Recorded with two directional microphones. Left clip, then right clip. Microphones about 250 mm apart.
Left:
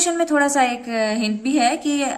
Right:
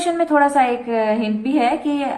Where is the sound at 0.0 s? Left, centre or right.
Left.